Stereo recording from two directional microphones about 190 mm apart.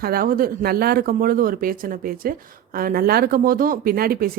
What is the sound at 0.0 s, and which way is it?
A woman's voice, 50° right (ahead or behind).